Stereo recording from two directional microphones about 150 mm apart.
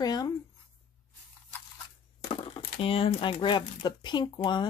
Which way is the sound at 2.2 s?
40° left (ahead or behind).